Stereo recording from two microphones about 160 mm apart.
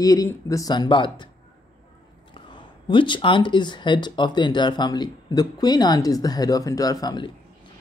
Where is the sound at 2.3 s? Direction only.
30° left (ahead or behind).